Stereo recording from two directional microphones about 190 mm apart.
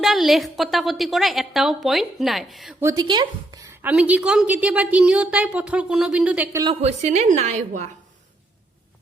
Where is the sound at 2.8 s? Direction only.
15° right (ahead or behind).